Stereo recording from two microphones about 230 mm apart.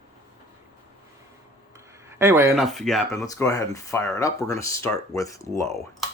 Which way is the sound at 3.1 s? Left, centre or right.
Centre.